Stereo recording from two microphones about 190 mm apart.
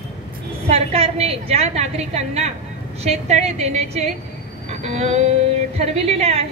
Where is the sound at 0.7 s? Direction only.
30° right (ahead or behind).